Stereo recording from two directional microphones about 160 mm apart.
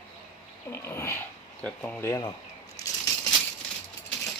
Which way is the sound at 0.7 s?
15° left (ahead or behind).